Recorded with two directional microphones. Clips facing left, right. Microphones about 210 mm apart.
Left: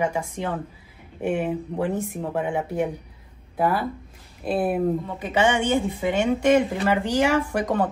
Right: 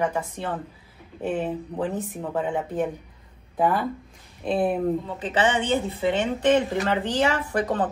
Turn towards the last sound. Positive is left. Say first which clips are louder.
# left 2 dB
turn(degrees=10)  # may be behind; listen again after turning